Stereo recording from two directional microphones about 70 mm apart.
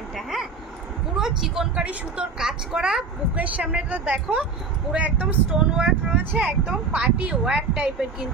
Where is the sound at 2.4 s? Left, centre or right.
Centre.